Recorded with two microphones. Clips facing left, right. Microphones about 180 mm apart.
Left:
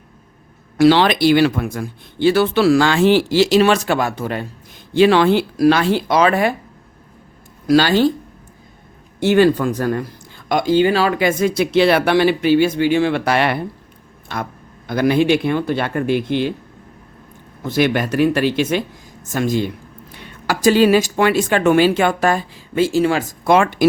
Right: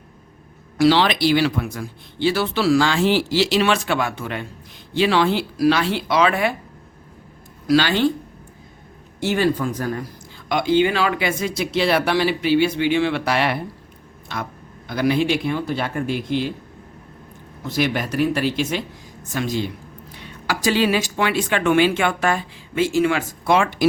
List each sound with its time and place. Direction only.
0.8 s speech: 55° left (ahead or behind)
4.9 s speech: 50° left (ahead or behind)
7.7 s speech: 40° left (ahead or behind)
9.3 s speech: 70° left (ahead or behind)
10.5 s speech: 45° left (ahead or behind); by 16.5 s 65° left (ahead or behind)
17.7 s speech: 60° left (ahead or behind)
19.2 s speech: 45° left (ahead or behind)
23.5 s speech: 50° left (ahead or behind)